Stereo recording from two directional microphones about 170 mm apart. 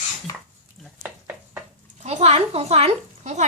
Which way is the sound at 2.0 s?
40° right (ahead or behind).